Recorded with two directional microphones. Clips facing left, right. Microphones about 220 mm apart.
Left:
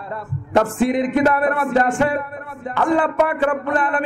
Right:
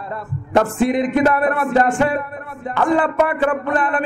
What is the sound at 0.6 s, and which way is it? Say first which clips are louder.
A man's voice: right 1 dB; 15° right (ahead or behind).